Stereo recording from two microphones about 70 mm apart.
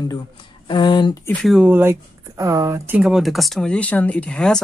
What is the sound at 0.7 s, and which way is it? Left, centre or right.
Speech, left.